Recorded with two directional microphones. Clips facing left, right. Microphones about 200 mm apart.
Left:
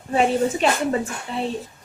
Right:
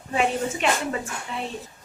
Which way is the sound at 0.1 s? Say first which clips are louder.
Left 5 dB; 35° left (ahead or behind).